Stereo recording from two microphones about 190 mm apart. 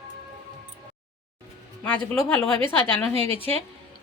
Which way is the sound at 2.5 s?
25° right (ahead or behind).